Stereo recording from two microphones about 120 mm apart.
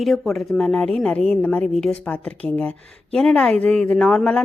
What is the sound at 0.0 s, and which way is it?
A woman's voice, centre (ahead or behind).